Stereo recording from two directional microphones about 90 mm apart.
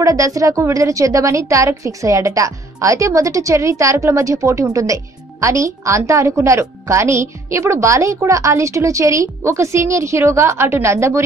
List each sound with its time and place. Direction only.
0.0 s a woman's voice: 40° right (ahead or behind)